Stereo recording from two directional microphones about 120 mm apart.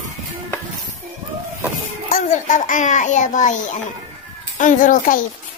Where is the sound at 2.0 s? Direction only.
80° left.